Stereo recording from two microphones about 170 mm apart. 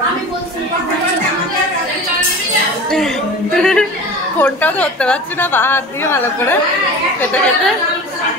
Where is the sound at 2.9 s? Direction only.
Centre (ahead or behind).